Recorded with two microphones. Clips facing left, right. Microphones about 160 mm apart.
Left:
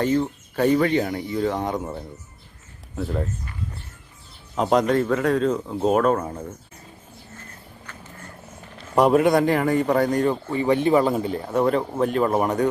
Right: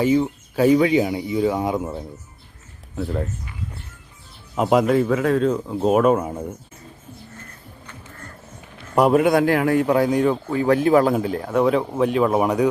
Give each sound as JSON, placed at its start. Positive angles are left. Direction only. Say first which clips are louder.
{"t": 0.0, "sound": "speech", "louder": "right 3 dB", "side_deg": -5}
{"t": 4.5, "sound": "speech", "louder": "right 2 dB", "side_deg": -5}
{"t": 9.0, "sound": "speech", "louder": "right 1 dB", "side_deg": 0}